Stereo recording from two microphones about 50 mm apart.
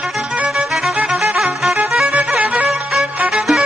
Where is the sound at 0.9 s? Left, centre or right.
Right.